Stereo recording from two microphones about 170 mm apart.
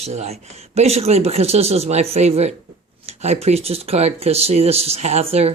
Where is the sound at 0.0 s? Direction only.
40° right (ahead or behind).